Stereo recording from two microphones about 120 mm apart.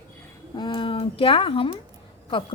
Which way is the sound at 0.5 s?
40° left (ahead or behind).